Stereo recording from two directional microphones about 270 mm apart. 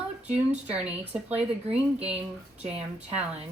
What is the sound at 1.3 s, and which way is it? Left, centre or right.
Speech, right.